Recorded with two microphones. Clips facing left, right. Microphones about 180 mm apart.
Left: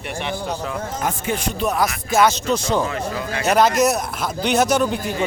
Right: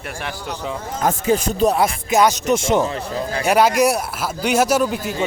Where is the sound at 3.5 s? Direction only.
10° right (ahead or behind).